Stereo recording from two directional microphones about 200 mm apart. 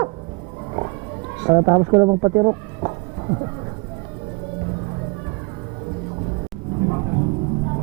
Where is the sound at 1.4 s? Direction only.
25° right (ahead or behind).